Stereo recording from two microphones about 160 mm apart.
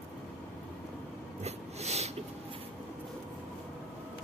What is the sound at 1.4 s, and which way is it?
Snort, 40° right (ahead or behind).